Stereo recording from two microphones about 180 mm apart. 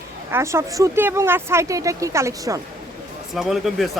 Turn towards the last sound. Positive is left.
turn(degrees=0)  # may be behind; listen again after turning